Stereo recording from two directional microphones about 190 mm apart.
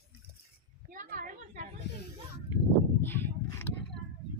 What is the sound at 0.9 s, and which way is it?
Speech, 45° right (ahead or behind).